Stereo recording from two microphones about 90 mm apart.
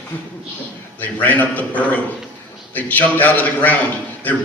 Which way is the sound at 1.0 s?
20° left (ahead or behind).